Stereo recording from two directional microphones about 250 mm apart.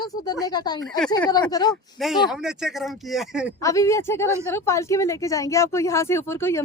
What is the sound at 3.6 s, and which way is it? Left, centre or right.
Speech, centre.